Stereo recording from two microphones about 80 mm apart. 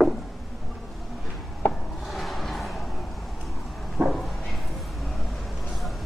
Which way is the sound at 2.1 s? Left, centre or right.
Centre.